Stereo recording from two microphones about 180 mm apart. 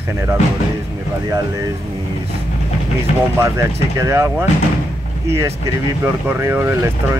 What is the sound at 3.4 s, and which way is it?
Speech, 15° right (ahead or behind).